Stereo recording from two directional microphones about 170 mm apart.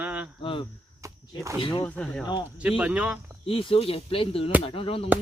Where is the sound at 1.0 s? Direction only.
20° right (ahead or behind).